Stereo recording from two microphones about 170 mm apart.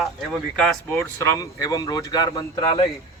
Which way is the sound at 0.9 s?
15° left (ahead or behind).